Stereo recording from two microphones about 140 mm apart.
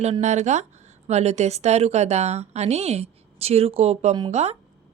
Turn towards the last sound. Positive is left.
turn(degrees=-50)  # may be behind; listen again after turning